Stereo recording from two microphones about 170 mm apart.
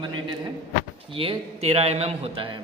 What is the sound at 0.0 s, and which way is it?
A man's voice, 30° right (ahead or behind).